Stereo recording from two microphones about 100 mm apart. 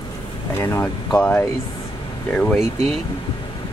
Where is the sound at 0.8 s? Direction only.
10° left (ahead or behind).